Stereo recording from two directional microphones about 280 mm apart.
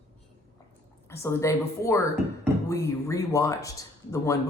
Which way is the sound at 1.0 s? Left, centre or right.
Centre.